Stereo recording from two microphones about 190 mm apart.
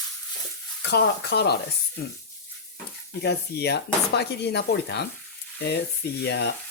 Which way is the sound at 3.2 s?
60° left (ahead or behind).